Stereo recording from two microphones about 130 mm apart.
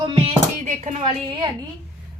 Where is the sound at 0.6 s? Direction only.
70° right (ahead or behind).